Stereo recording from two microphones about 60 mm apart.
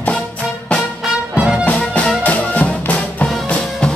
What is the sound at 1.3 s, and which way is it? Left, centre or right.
Music, centre.